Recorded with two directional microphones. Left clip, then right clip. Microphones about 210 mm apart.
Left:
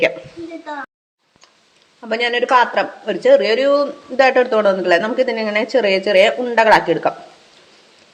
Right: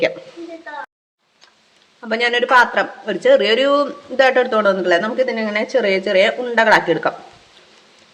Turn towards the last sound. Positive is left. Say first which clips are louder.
# left 1 dB
turn(degrees=5)  # may be behind; listen again after turning